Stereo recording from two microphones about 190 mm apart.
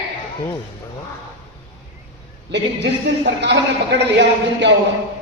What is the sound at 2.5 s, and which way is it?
Speech, 65° right (ahead or behind).